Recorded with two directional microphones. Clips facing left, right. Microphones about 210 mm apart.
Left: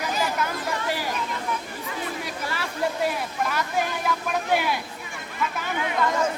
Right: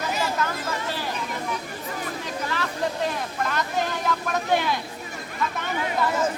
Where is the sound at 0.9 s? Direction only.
10° left (ahead or behind).